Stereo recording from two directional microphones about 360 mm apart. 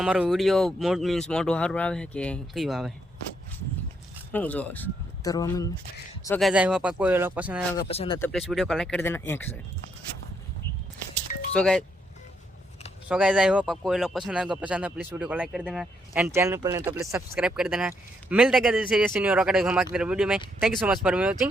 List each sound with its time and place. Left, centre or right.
0.0 s speech: centre
4.3 s speech: centre
7.8 s speech: centre
8.3 s speech: centre
11.5 s speech: centre
13.1 s speech: centre